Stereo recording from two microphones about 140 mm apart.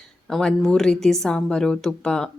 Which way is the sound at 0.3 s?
Centre (ahead or behind).